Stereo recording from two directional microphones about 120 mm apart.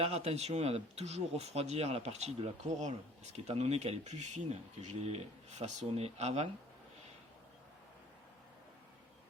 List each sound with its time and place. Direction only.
0.0 s speech: 60° right (ahead or behind)
3.4 s speech: 60° right (ahead or behind)